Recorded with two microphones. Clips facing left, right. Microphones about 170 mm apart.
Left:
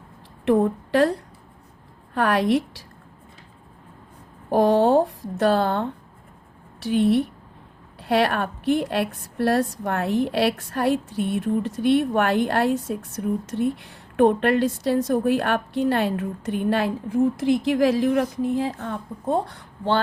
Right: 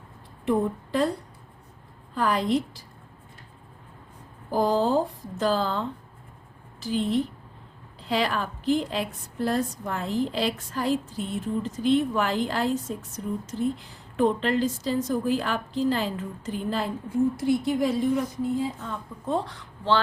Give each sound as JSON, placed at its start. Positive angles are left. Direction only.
{"t": 0.4, "sound": "a woman's voice", "side_deg": 80}
{"t": 2.1, "sound": "a woman's voice", "side_deg": 70}
{"t": 4.4, "sound": "a woman's voice", "side_deg": 70}
{"t": 19.3, "sound": "speech", "side_deg": 50}